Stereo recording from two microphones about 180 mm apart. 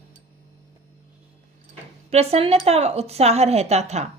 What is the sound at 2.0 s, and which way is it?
Speech, 35° right (ahead or behind).